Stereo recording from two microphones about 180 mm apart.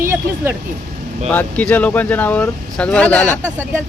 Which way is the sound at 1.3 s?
10° left (ahead or behind).